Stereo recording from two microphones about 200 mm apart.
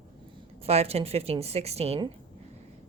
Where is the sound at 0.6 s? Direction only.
30° right (ahead or behind).